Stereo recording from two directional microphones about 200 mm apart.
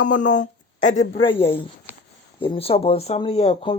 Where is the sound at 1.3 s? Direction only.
25° left (ahead or behind).